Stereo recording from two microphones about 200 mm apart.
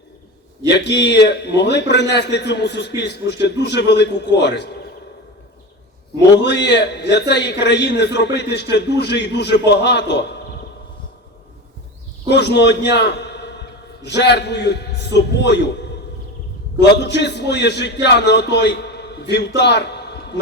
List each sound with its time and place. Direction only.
0.7 s a man's voice: 60° left (ahead or behind)
6.4 s a man's voice: 60° left (ahead or behind)
12.3 s a sound: 60° left (ahead or behind)
14.2 s a man's voice: 55° left (ahead or behind)
17.0 s speech: 60° left (ahead or behind)